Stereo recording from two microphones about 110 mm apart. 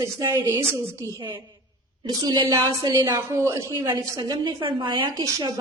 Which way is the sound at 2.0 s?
40° right (ahead or behind).